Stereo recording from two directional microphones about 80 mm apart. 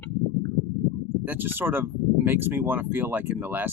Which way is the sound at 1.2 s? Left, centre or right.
Right.